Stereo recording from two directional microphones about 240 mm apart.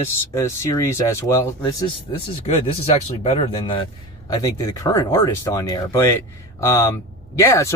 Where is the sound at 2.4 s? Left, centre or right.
Left.